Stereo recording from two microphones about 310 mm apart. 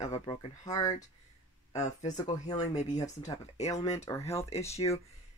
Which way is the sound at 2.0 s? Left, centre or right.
Centre.